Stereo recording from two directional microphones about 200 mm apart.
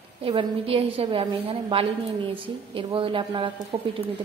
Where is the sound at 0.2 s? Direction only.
25° right (ahead or behind).